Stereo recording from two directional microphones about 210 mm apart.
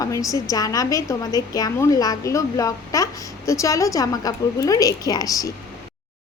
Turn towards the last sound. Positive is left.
turn(degrees=15)  # may be behind; listen again after turning